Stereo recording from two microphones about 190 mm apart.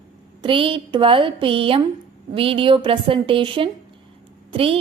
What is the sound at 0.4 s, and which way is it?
A woman's voice, 30° right (ahead or behind).